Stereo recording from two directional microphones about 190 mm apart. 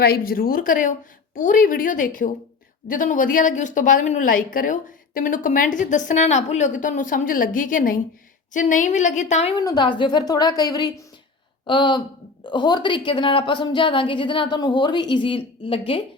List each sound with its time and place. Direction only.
0.0 s a woman's voice: 50° left (ahead or behind)
9.6 s speech: 20° left (ahead or behind)